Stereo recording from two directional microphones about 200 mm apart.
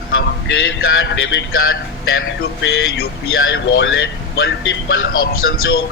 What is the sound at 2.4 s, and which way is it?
A man's voice, 60° left (ahead or behind).